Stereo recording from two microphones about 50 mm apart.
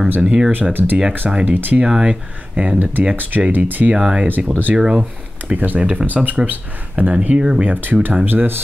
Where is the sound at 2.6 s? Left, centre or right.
Right.